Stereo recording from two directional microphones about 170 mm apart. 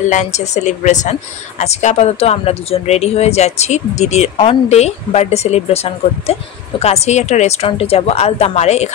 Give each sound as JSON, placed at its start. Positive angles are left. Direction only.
{"t": 0.1, "sound": "a woman's voice", "side_deg": 45}